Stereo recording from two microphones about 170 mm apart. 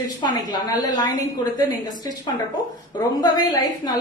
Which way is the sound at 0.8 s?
25° left (ahead or behind).